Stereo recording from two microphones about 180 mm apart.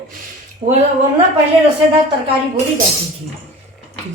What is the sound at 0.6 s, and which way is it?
Speech, 40° right (ahead or behind).